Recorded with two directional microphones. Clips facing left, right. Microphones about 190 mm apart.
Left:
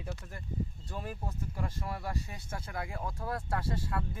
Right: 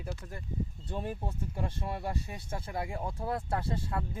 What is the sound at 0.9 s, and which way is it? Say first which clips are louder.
Speech: right 8 dB; 25° right (ahead or behind).